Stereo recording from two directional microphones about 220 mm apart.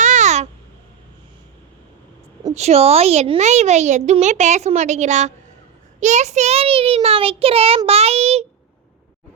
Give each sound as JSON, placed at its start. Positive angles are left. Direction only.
{"t": 0.0, "sound": "babbling", "side_deg": -30}
{"t": 2.6, "sound": "a woman's voice", "side_deg": -30}